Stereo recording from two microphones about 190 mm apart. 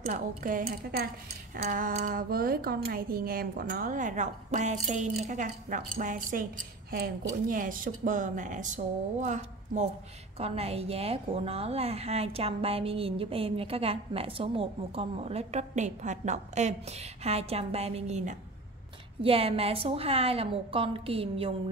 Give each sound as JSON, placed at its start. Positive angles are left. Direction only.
{"t": 0.1, "sound": "a woman's voice", "side_deg": -45}